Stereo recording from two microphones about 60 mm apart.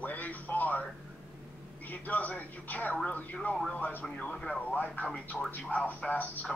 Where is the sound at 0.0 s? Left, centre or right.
Left.